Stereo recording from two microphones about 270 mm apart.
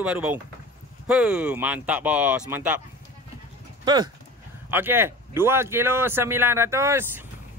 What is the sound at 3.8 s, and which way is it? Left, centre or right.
Speech, centre.